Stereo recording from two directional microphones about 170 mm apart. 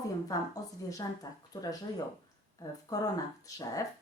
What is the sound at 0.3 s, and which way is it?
Speech, 20° left (ahead or behind).